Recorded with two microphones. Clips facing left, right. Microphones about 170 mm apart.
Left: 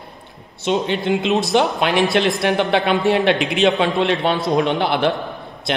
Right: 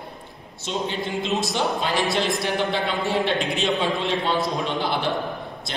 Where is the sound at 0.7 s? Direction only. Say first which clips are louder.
Left 8 dB; 70° left (ahead or behind).